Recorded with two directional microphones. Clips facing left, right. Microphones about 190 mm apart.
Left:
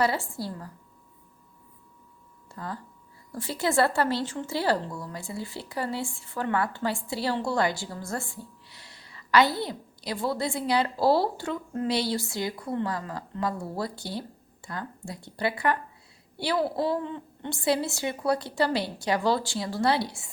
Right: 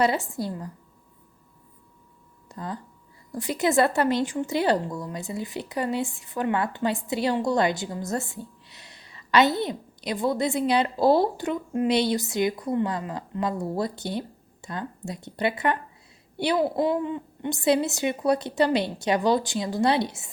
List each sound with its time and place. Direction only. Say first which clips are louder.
0.0 s speech: right 3 dB; 20° right (ahead or behind)
2.5 s speech: right 3 dB; 20° right (ahead or behind)